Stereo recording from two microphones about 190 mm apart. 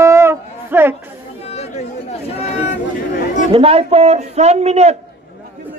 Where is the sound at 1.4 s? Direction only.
35° left (ahead or behind).